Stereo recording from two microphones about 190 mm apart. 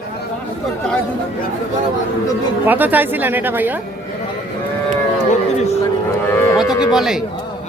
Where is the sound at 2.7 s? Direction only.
10° right (ahead or behind).